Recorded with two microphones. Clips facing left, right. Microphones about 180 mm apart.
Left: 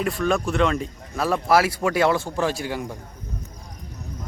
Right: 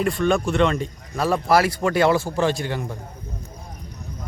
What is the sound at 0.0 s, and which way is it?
Speech, centre (ahead or behind).